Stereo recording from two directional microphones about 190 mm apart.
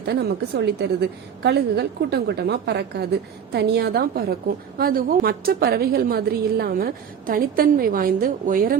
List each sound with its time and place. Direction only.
0.0 s a woman's voice: 60° right (ahead or behind)